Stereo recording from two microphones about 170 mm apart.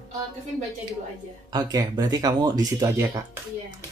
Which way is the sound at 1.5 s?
25° right (ahead or behind).